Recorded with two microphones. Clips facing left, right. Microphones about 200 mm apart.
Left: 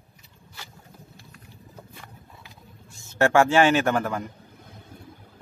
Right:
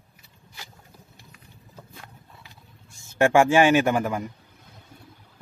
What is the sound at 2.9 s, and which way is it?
A man's voice, 15° right (ahead or behind).